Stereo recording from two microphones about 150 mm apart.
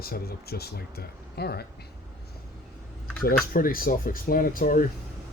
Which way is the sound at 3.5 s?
75° left (ahead or behind).